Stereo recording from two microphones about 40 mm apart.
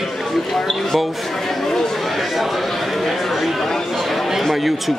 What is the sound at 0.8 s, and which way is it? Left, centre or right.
Chatter, centre.